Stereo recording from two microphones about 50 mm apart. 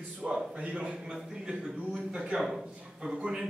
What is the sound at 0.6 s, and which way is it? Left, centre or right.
Speech, right.